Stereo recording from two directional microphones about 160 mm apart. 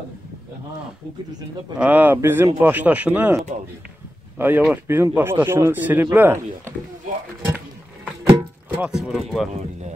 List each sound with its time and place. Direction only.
1.8 s a man's voice: 10° right (ahead or behind)
7.4 s a sound: 10° right (ahead or behind)
8.3 s music: 10° right (ahead or behind)
9.5 s speech: 45° right (ahead or behind)